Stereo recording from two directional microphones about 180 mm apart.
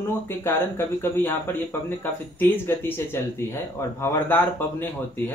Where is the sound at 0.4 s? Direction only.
10° left (ahead or behind).